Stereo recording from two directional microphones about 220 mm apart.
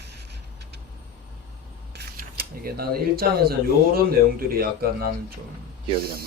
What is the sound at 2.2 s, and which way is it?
Speech, 45° right (ahead or behind).